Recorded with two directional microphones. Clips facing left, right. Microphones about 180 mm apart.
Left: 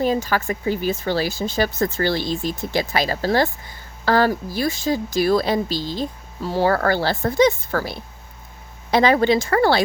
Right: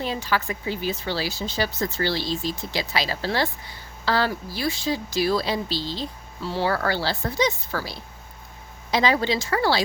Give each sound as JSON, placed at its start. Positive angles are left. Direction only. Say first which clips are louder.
{"t": 0.0, "sound": "speech", "louder": "left 6 dB", "side_deg": 45}